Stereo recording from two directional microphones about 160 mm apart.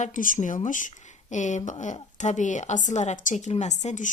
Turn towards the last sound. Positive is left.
turn(degrees=50)  # may be behind; listen again after turning